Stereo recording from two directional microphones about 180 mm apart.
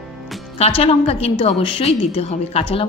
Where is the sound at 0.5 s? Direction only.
35° left (ahead or behind).